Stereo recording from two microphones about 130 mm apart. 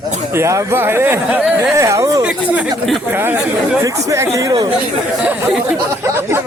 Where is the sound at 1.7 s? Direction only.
25° right (ahead or behind).